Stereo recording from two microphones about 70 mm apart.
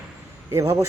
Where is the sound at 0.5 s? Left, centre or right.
Right.